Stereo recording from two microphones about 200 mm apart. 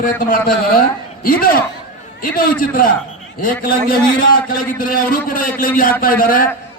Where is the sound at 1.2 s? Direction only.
45° left (ahead or behind).